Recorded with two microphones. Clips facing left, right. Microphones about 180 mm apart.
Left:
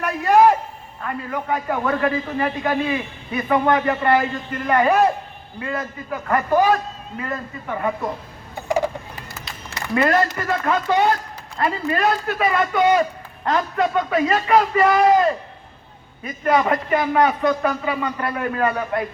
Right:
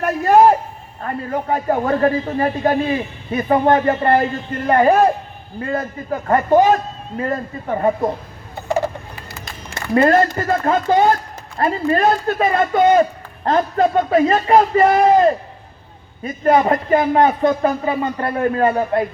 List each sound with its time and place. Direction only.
0.0 s a sound: 35° right (ahead or behind)
1.0 s a man's voice: 40° right (ahead or behind)
7.2 s a man's voice: 35° right (ahead or behind)
10.0 s a man's voice: 30° right (ahead or behind)